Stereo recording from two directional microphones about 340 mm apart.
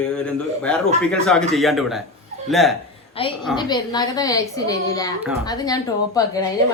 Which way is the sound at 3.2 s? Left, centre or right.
Centre.